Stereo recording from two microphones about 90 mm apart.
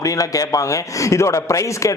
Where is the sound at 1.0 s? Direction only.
35° left (ahead or behind).